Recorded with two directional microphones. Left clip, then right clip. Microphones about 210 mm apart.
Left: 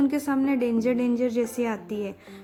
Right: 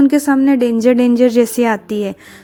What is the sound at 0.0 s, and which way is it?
A woman's voice, 30° right (ahead or behind).